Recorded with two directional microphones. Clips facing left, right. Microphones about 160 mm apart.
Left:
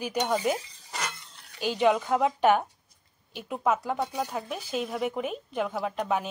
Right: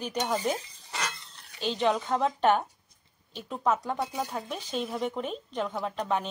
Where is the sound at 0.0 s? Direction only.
10° left (ahead or behind).